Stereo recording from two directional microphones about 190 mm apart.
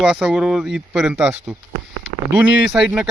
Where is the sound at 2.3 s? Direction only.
5° right (ahead or behind).